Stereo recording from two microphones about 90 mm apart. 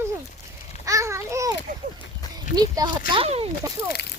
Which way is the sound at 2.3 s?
50° right (ahead or behind).